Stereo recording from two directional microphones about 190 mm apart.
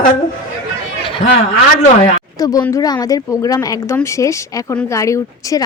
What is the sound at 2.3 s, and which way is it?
Speech, 20° left (ahead or behind).